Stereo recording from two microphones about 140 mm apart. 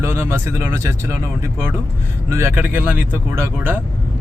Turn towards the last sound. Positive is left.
turn(degrees=-15)  # may be behind; listen again after turning